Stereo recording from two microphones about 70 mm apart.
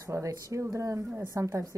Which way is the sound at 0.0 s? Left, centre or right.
Right.